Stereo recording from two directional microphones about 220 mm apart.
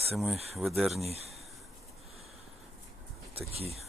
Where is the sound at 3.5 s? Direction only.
25° right (ahead or behind).